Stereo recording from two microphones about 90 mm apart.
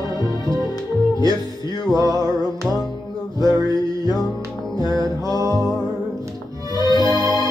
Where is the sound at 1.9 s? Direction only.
40° right (ahead or behind).